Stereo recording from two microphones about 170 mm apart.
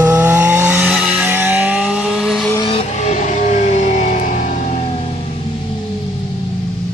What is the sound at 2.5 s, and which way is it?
Vehicle, 30° left (ahead or behind).